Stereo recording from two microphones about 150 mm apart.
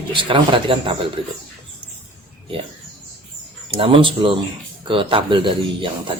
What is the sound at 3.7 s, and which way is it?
Speech, 35° right (ahead or behind).